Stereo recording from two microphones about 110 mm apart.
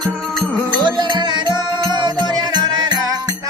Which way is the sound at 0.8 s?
45° right (ahead or behind).